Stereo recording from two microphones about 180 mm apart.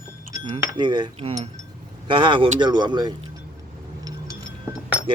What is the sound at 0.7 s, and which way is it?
Speech, 25° right (ahead or behind).